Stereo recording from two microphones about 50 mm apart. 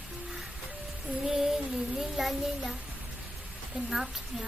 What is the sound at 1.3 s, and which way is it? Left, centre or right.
Speech, centre.